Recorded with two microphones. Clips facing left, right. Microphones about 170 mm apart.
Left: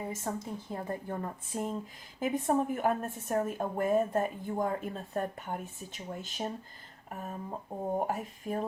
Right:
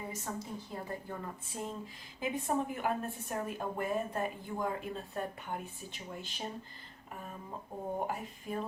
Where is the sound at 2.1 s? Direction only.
45° left (ahead or behind).